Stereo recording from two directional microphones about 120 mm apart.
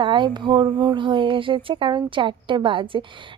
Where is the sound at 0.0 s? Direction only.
40° right (ahead or behind).